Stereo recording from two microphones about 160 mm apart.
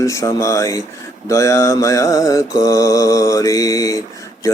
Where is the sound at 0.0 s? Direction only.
20° left (ahead or behind).